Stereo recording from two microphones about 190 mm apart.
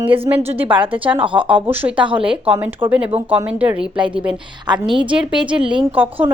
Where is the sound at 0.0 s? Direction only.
30° right (ahead or behind).